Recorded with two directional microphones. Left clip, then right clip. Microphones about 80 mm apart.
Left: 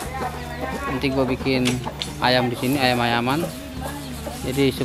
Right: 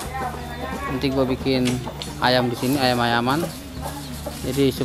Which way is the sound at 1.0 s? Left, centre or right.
Centre.